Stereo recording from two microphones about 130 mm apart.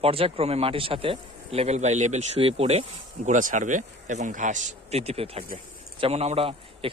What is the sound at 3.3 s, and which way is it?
Speech, 80° right.